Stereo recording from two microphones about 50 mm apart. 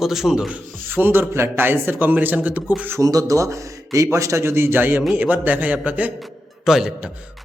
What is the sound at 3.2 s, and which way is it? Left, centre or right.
A man's voice, right.